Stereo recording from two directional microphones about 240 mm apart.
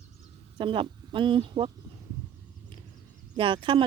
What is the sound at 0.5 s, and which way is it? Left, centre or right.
Speech, right.